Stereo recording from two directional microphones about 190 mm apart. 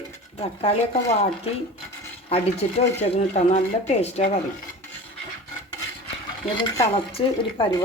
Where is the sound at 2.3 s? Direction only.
35° left (ahead or behind).